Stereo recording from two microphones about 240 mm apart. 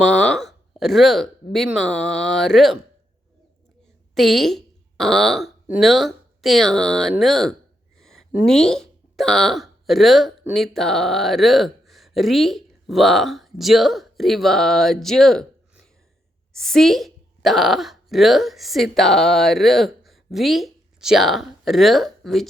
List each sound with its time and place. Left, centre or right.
0.0 s speech: centre
4.1 s a woman's voice: centre